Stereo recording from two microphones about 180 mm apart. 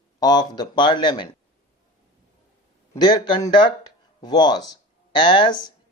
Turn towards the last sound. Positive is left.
turn(degrees=25)  # may be behind; listen again after turning